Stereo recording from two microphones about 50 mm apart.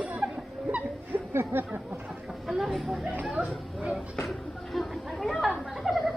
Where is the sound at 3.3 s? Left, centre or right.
Centre.